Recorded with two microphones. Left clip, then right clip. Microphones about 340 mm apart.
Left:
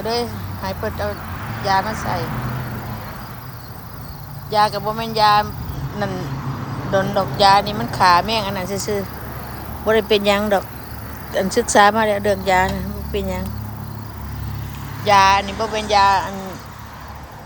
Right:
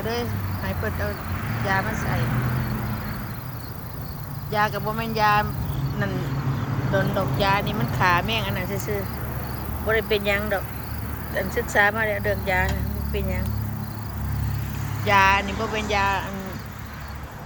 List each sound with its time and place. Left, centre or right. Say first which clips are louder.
0.1 s speech: left 6 dB; centre
4.5 s speech: left 6 dB; centre
15.0 s speech: left 5 dB; centre